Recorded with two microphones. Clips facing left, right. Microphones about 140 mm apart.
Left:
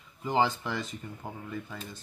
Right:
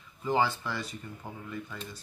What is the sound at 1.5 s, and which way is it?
Speech, 40° left (ahead or behind).